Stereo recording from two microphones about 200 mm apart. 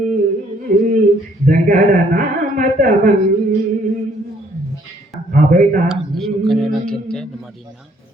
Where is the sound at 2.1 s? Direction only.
45° right (ahead or behind).